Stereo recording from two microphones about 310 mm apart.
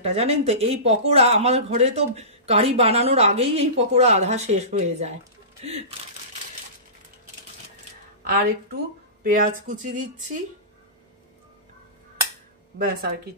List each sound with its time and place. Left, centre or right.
0.0 s speech: centre
8.2 s speech: right
12.7 s speech: right